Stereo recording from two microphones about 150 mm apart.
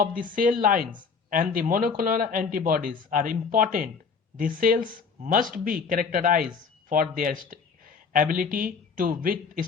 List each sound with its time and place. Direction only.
0.0 s speech: 65° right (ahead or behind)